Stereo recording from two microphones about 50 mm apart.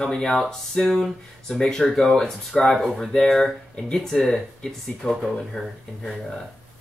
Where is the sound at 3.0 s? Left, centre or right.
Centre.